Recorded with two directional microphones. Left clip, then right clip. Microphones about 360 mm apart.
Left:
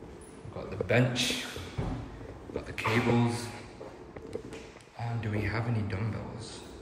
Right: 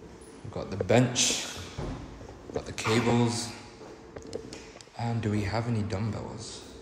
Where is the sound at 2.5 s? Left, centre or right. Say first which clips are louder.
Right 2 dB; centre.